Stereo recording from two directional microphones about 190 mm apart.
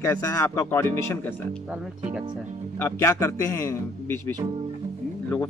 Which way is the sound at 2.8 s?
15° left (ahead or behind).